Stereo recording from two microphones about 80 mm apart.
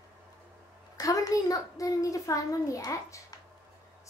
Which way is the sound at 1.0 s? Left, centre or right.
Left.